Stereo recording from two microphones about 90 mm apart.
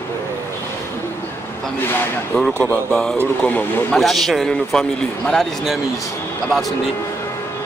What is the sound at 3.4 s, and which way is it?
Speech, 15° left (ahead or behind).